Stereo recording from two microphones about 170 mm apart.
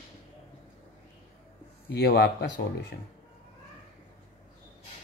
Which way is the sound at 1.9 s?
65° left (ahead or behind).